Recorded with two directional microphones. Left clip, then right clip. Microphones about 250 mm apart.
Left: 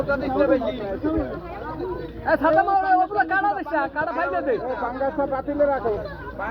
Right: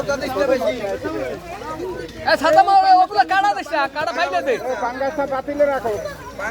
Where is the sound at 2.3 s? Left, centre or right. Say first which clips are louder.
Right 5 dB; right.